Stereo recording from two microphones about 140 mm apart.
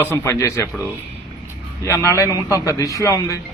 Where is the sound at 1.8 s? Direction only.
20° left (ahead or behind).